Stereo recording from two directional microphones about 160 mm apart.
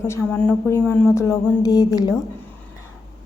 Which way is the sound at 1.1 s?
20° left (ahead or behind).